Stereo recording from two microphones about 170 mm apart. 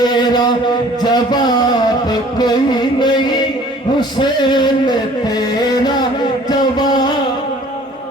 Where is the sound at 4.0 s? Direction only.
25° left (ahead or behind).